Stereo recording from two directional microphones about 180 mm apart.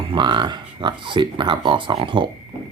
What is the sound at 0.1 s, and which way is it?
Speech, 25° right (ahead or behind).